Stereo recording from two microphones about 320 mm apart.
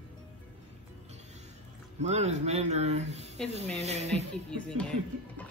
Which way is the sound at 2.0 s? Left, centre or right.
Right.